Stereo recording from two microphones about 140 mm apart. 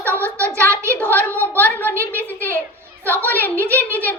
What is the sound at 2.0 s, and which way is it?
A woman's voice, 10° left (ahead or behind).